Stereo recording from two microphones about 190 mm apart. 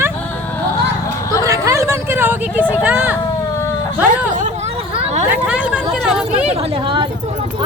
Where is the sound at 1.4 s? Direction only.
15° right (ahead or behind).